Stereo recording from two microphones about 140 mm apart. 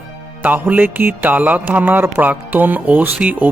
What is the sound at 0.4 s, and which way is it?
Speech, 10° right (ahead or behind).